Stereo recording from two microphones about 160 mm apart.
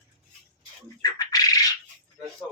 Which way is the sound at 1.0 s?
25° left (ahead or behind).